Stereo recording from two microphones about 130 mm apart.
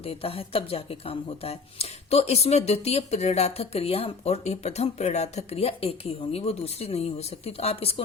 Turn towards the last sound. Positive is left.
turn(degrees=50)  # may be behind; listen again after turning